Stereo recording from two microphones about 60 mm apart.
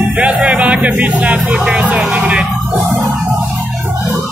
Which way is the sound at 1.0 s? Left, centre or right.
Right.